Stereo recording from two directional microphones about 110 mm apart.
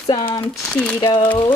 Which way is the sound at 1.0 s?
45° left (ahead or behind).